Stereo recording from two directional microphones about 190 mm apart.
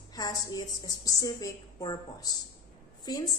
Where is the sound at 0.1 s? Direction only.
20° left (ahead or behind).